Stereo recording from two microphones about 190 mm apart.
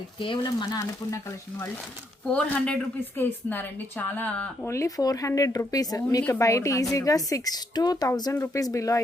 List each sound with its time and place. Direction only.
0.2 s frying: 25° left (ahead or behind)
2.2 s speech: 5° left (ahead or behind)